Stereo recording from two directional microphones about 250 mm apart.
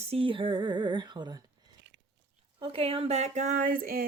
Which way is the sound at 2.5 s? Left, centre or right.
Right.